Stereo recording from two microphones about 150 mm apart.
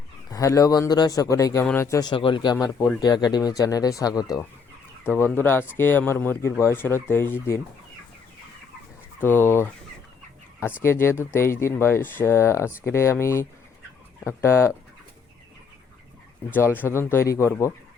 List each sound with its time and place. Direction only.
0.3 s speech: 25° left (ahead or behind)
9.2 s speech: 15° left (ahead or behind)
10.8 s speech: 15° left (ahead or behind)
16.5 s speech: 15° left (ahead or behind)